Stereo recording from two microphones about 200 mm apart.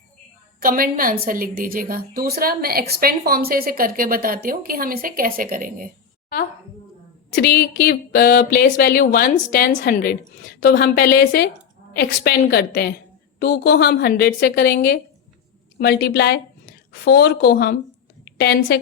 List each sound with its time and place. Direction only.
0.6 s a woman's voice: 45° right (ahead or behind)
7.3 s a woman's voice: 55° left (ahead or behind)